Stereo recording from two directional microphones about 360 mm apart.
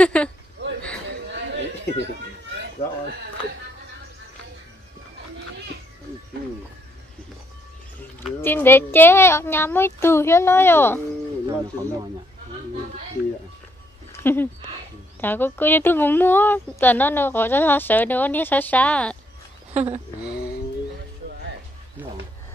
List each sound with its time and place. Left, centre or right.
0.0 s a sound: centre
1.1 s chatter: right
8.3 s speech: centre
11.4 s speech: centre
14.1 s speech: centre
19.7 s speech: centre